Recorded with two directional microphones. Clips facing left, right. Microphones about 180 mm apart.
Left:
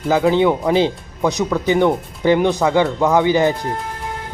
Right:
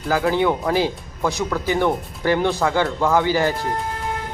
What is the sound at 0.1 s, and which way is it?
Speech, 20° left (ahead or behind).